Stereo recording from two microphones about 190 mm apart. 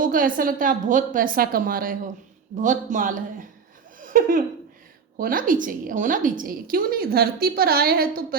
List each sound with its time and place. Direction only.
0.0 s a woman's voice: 45° right (ahead or behind)
3.9 s laughter: 45° right (ahead or behind)
5.1 s a woman's voice: 45° right (ahead or behind)